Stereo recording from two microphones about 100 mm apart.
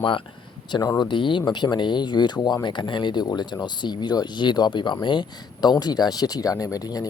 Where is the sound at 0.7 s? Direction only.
40° left (ahead or behind).